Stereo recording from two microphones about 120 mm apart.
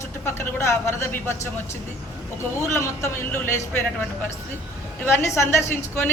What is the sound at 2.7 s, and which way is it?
A man's voice, 25° left (ahead or behind).